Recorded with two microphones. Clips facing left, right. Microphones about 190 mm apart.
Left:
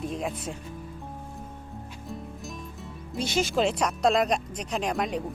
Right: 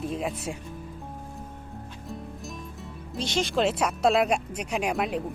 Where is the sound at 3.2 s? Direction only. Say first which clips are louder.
Even; 5° left (ahead or behind).